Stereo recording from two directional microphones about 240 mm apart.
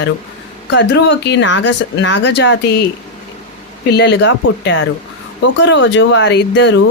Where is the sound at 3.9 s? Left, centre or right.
Left.